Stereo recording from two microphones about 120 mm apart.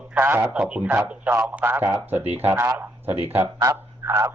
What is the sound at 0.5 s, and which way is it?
A man's voice, 10° right (ahead or behind).